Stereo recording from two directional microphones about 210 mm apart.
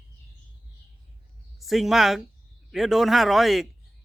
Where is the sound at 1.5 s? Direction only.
Centre (ahead or behind).